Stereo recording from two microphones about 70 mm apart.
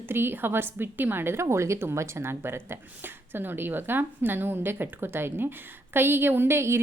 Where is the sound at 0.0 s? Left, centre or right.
Right.